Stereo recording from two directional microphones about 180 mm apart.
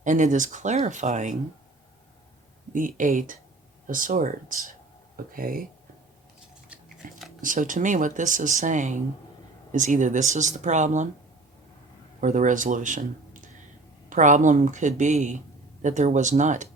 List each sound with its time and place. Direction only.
0.0 s speech: 45° right (ahead or behind)
2.7 s speech: 50° right (ahead or behind)
6.7 s a sound: 5° right (ahead or behind)
7.4 s speech: 45° right (ahead or behind)
12.2 s speech: 45° right (ahead or behind)